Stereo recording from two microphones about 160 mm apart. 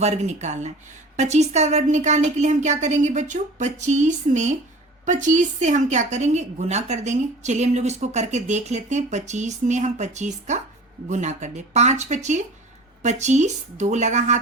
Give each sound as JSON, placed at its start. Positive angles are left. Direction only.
{"t": 0.0, "sound": "a woman's voice", "side_deg": -45}